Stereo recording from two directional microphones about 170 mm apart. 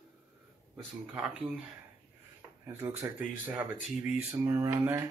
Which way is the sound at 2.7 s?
10° right (ahead or behind).